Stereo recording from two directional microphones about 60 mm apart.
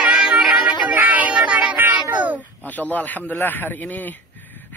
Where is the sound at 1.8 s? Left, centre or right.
Right.